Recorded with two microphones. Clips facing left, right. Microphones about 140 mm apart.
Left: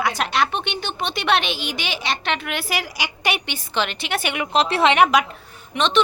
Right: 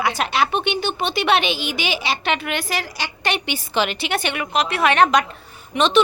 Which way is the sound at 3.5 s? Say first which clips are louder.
Right 3 dB; 5° right (ahead or behind).